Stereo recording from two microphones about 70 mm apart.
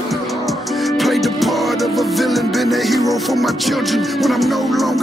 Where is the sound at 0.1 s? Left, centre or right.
Centre.